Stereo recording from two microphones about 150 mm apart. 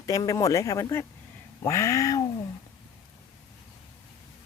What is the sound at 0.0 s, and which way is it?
Speech, 25° left (ahead or behind).